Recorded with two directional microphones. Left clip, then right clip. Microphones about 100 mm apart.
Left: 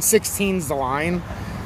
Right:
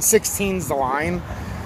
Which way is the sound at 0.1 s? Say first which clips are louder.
Even; 25° left (ahead or behind).